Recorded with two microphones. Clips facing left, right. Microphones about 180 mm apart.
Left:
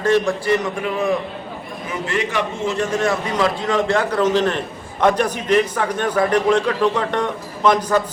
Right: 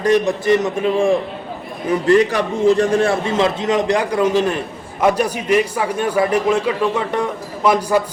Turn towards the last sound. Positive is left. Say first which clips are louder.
# right 1 dB
turn(degrees=-10)  # may be behind; listen again after turning